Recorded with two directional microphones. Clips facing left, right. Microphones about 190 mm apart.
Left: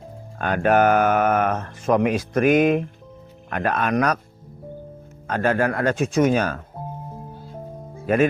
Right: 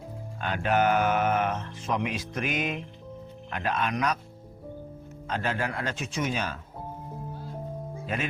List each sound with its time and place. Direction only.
0.3 s speech: 55° left (ahead or behind)
5.3 s speech: 50° left (ahead or behind)
8.0 s speech: 55° left (ahead or behind)